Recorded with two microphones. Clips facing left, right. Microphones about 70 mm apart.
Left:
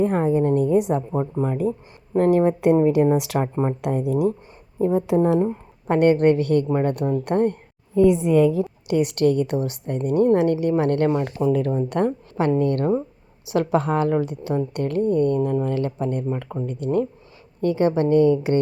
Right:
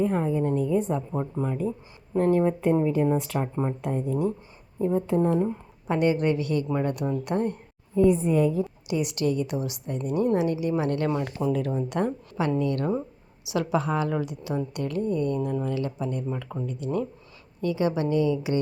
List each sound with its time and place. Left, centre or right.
0.0 s a woman's voice: left
1.1 s a woman's voice: left
2.1 s a woman's voice: left
3.8 s speech: left
5.4 s a woman's voice: left
7.9 s a woman's voice: left
8.9 s a woman's voice: left